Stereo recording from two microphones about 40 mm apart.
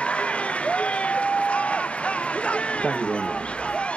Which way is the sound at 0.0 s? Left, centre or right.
Left.